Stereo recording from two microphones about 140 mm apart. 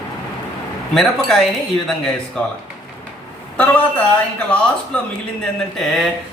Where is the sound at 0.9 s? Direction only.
Centre (ahead or behind).